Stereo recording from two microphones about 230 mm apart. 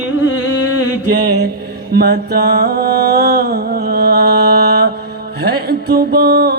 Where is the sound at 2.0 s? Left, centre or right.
Right.